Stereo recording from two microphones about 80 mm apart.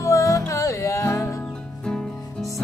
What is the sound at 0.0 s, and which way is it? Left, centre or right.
Music, left.